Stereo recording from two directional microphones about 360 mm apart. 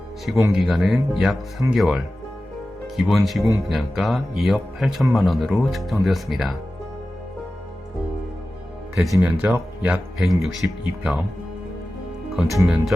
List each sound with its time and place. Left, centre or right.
0.3 s speech: centre
9.0 s speech: centre
12.4 s speech: centre